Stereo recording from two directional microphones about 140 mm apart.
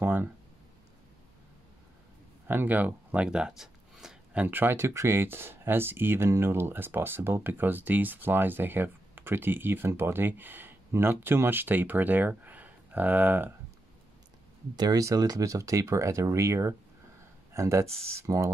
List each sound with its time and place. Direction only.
0.0 s a sound: 15° right (ahead or behind)
2.4 s speech: 15° right (ahead or behind)
14.8 s speech: 25° right (ahead or behind)